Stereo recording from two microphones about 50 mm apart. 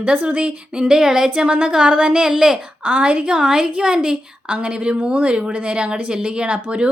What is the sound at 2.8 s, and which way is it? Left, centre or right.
Speech, right.